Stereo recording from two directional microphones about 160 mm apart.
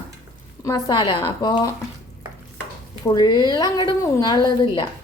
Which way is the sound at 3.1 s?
25° left (ahead or behind).